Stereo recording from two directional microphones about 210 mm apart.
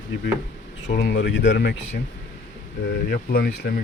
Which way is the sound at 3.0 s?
45° left (ahead or behind).